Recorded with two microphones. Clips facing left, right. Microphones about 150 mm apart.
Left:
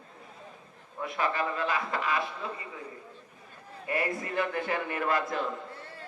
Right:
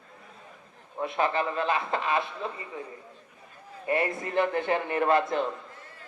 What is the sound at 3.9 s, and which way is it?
A man's voice, 25° right (ahead or behind).